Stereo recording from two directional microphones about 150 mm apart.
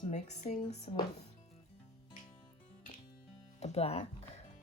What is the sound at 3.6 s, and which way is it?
Speech, 45° left (ahead or behind).